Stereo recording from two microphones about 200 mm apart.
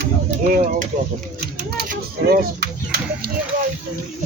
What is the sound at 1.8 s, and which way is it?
Speech, 50° right (ahead or behind).